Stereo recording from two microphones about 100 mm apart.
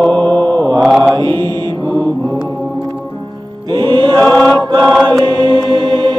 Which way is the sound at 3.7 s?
45° right (ahead or behind).